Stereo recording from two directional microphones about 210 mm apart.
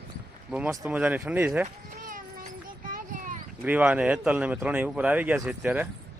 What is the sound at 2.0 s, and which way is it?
Children playing, 40° right (ahead or behind).